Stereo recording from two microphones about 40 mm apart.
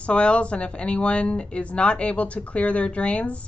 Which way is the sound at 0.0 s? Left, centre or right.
Left.